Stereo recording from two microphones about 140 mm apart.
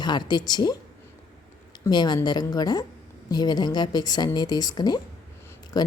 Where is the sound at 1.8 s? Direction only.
30° left (ahead or behind).